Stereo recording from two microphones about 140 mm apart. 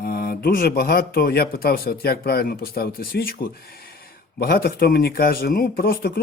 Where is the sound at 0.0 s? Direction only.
90° left.